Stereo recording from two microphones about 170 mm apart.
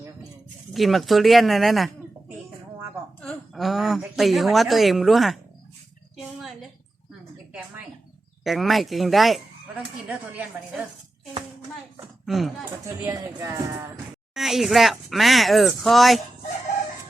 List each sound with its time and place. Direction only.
0.7 s speech: centre (ahead or behind)
3.2 s a woman's voice: centre (ahead or behind)
8.4 s speech: centre (ahead or behind)
12.2 s speech: centre (ahead or behind)
13.1 s speech: 20° right (ahead or behind)
14.3 s speech: centre (ahead or behind)